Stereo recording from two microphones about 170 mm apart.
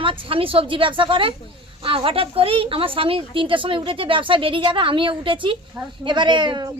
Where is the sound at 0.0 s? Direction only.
30° right (ahead or behind).